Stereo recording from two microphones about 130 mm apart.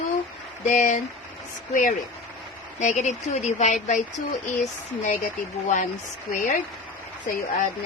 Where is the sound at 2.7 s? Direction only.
60° left (ahead or behind).